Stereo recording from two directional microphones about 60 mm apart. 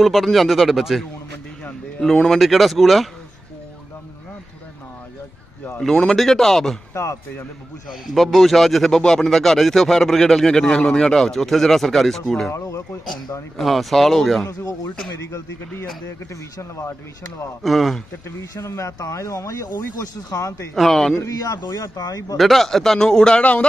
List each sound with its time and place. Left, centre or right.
0.0 s speech: centre
2.2 s speech: centre
5.8 s a man's voice: centre
6.9 s speech: left
7.9 s speech: centre
12.5 s speech: left
13.6 s speech: centre
15.1 s speech: left
17.6 s speech: centre
18.4 s speech: left
20.0 s speech: left
20.7 s speech: centre
21.9 s speech: left
22.4 s a man's voice: centre